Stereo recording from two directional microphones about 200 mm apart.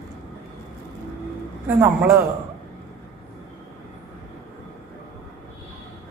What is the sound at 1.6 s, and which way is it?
Speech, 10° right (ahead or behind).